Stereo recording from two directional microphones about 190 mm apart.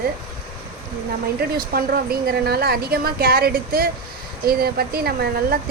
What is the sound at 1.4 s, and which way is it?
Speech, 55° right (ahead or behind).